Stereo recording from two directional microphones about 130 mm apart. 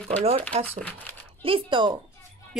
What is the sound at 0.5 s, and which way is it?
Speech, 55° right (ahead or behind).